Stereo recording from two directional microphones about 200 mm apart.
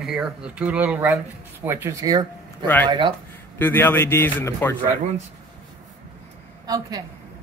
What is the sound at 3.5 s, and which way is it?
A man's voice, 10° left (ahead or behind).